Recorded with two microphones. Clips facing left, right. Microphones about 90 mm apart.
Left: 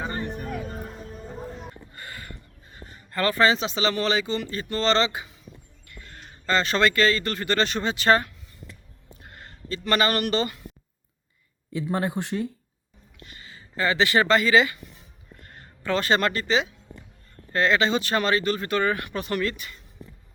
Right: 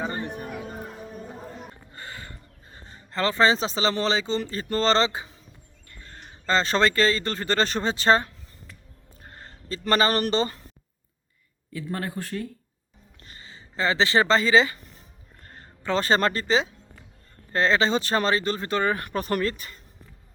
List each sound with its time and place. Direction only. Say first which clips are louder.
0.0 s music: even; 15° right (ahead or behind)
1.9 s music: even; 25° right (ahead or behind)
2.7 s speech: even; 30° right (ahead or behind)
11.7 s speech: left 5 dB; 20° left (ahead or behind)
13.1 s speech: left 1 dB; 35° right (ahead or behind)